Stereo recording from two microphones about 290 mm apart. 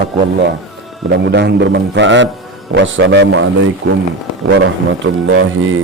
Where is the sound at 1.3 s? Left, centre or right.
Right.